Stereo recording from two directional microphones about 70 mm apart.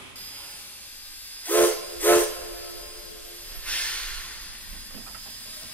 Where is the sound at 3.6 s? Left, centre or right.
Centre.